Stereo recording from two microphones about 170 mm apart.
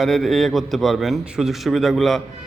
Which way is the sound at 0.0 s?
Centre (ahead or behind).